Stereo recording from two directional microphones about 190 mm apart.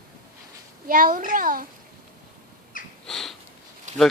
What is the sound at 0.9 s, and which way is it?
Speech, 45° right (ahead or behind).